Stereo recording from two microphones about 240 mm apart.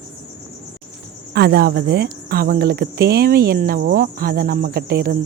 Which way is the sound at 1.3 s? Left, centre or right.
Right.